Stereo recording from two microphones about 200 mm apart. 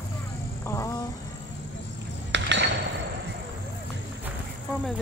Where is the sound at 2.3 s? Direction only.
65° right (ahead or behind).